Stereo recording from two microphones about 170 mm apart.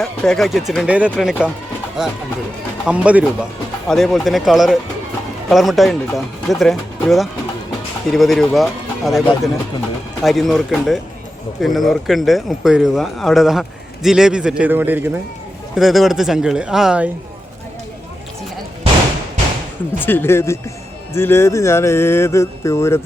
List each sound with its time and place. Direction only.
0.0 s speech: 5° left (ahead or behind)
2.8 s speech: 10° right (ahead or behind)
15.7 s speech: centre (ahead or behind)
20.0 s speech: 10° left (ahead or behind)